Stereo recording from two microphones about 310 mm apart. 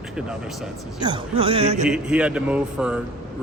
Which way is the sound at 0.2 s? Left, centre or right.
Centre.